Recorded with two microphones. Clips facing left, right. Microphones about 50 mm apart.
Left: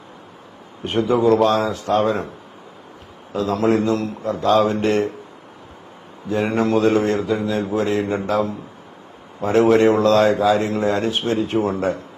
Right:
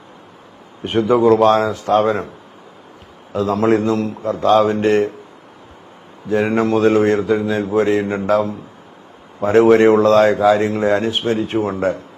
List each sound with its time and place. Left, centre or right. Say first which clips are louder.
0.9 s speech: right 3 dB; right
3.3 s speech: right 3 dB; right
4.9 s speech: right 4 dB; right
6.2 s speech: right 3 dB; right
9.4 s speech: right 4 dB; right